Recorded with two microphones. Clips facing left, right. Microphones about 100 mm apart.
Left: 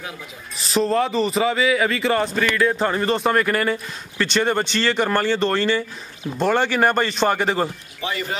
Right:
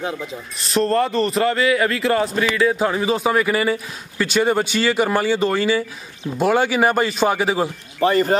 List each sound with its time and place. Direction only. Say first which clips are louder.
0.6 s a man's voice: right 1 dB; centre (ahead or behind)
8.0 s speech: right 11 dB; 45° right (ahead or behind)